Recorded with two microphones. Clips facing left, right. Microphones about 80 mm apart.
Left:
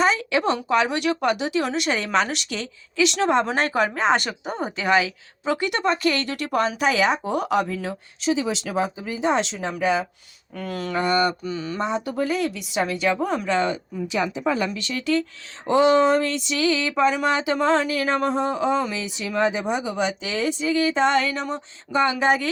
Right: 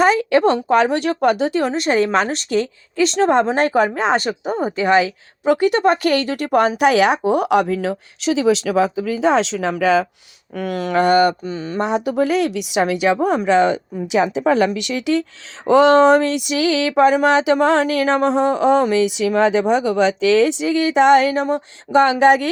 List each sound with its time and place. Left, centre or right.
0.0 s speech: right
4.4 s speech: centre
4.8 s a woman's voice: right
10.5 s a woman's voice: right
11.4 s speech: right
11.8 s speech: right
15.6 s speech: right
21.9 s speech: right